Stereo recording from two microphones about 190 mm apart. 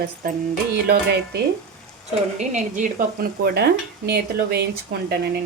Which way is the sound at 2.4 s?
40° right (ahead or behind).